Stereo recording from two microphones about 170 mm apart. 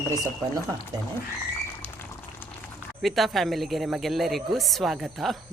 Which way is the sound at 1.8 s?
15° left (ahead or behind).